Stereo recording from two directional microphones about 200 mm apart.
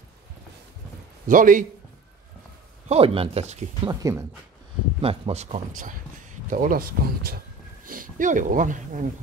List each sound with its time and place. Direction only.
1.2 s speech: 40° right (ahead or behind)
2.9 s speech: 30° right (ahead or behind)
3.9 s speech: 15° right (ahead or behind)
5.0 s speech: 30° right (ahead or behind)